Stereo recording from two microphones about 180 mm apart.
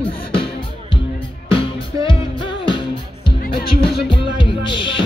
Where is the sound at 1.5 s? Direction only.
30° left (ahead or behind).